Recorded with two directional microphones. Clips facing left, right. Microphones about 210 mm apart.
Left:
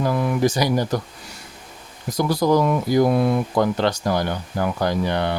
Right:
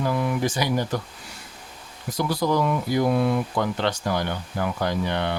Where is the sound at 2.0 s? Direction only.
40° left (ahead or behind).